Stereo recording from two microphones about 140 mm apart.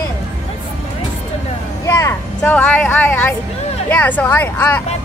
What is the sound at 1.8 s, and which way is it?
Speech, 20° left (ahead or behind).